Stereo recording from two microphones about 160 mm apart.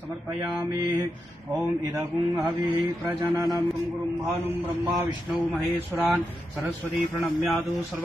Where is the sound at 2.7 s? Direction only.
15° right (ahead or behind).